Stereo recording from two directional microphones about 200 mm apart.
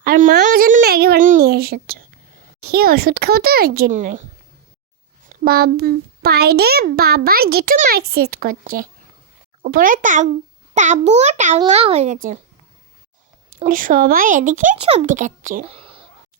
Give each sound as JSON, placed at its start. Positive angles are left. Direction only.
{"t": 0.0, "sound": "a sound", "side_deg": -45}
{"t": 2.6, "sound": "a child's voice", "side_deg": -50}
{"t": 5.3, "sound": "a child's voice", "side_deg": -50}
{"t": 13.7, "sound": "speech", "side_deg": -45}
{"t": 15.6, "sound": "speech", "side_deg": -30}